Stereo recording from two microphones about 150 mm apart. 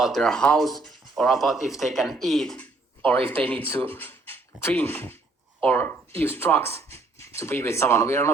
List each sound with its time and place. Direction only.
0.0 s speech: centre (ahead or behind); by 8.3 s 15° left (ahead or behind)